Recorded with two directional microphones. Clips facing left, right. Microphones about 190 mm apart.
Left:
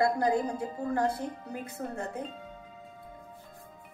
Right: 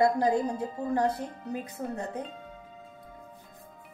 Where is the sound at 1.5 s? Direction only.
20° right (ahead or behind).